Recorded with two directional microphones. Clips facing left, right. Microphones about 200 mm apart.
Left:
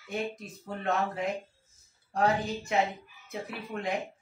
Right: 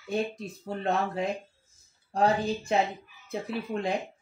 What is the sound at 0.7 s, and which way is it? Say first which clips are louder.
Speech: right 2 dB; 30° right (ahead or behind).